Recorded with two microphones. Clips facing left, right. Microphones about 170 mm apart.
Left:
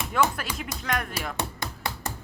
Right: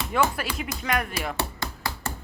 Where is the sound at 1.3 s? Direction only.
15° left (ahead or behind).